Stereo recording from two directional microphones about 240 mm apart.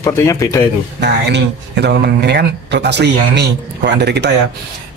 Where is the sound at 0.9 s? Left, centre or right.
Right.